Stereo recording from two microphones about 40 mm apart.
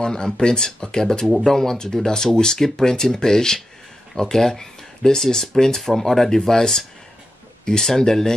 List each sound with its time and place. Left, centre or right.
0.0 s speech: centre